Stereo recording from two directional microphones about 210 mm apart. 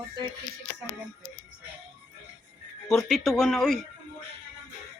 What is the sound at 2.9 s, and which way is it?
Speech, centre (ahead or behind).